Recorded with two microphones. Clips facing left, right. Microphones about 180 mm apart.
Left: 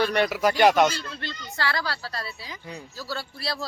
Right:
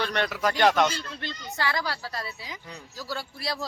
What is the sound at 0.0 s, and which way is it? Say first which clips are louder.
Speech: left 5 dB; 10° left (ahead or behind).